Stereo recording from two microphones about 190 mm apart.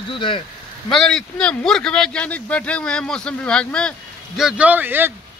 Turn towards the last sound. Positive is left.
turn(degrees=-10)  # may be behind; listen again after turning